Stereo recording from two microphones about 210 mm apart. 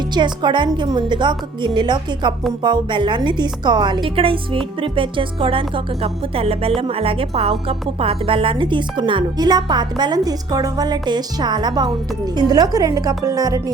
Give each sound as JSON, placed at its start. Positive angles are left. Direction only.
{"t": 0.1, "sound": "a woman's voice", "side_deg": -20}